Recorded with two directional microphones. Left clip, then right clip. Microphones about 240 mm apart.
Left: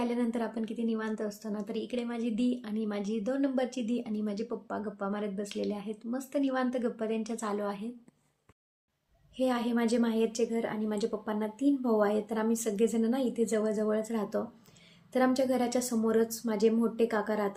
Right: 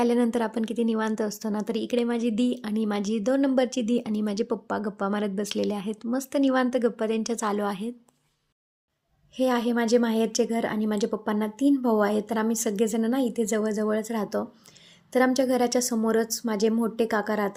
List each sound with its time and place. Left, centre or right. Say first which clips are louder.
0.0 s a woman's voice: right 9 dB; right
9.3 s a woman's voice: right 6 dB; right